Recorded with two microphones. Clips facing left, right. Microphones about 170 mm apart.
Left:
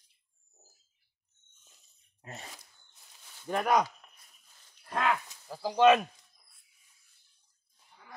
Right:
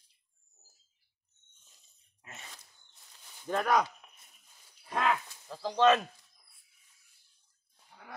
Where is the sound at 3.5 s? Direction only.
10° left (ahead or behind).